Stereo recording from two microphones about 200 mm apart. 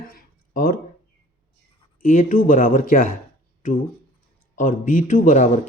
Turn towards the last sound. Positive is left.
turn(degrees=40)  # may be behind; listen again after turning